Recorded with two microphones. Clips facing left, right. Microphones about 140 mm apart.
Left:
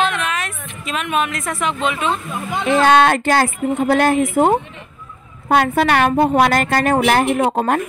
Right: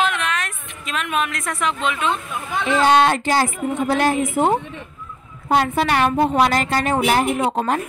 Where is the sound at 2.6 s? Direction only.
55° left (ahead or behind).